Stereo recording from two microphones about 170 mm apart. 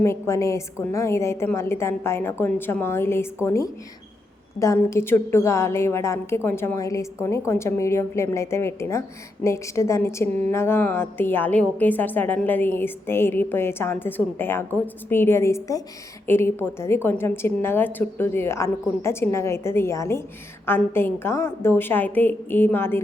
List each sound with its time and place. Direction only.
0.0 s a woman's voice: 15° left (ahead or behind)